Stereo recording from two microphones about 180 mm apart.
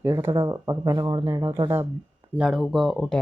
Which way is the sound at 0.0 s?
15° right (ahead or behind).